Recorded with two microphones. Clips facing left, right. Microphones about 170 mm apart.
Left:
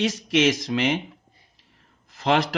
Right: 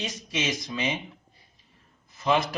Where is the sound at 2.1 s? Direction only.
90° left.